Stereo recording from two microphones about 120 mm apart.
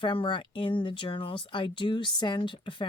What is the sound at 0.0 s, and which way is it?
Speech, 45° left (ahead or behind).